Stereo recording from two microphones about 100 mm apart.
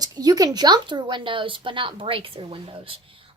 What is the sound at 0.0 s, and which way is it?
A woman's voice, 40° right (ahead or behind).